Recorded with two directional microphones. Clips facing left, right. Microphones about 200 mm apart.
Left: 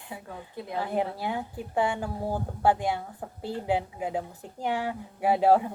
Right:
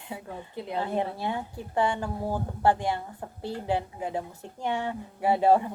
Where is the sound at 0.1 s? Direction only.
20° right (ahead or behind).